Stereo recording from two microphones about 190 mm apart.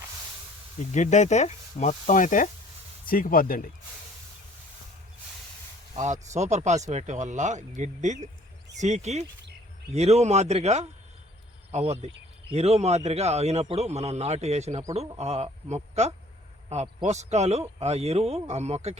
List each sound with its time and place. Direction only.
0.9 s speech: 40° left (ahead or behind)
6.0 s speech: 35° right (ahead or behind)